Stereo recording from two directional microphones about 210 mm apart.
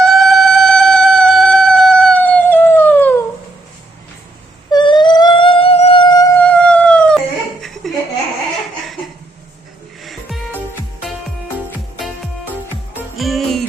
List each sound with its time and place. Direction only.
0.0 s a sound: centre (ahead or behind)
4.7 s a sound: 20° left (ahead or behind)
6.4 s howl: 5° left (ahead or behind)
7.8 s laughter: centre (ahead or behind)
10.0 s music: centre (ahead or behind)
11.9 s music: centre (ahead or behind)